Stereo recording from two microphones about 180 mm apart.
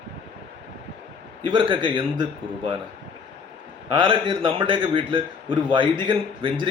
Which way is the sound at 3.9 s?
25° right (ahead or behind).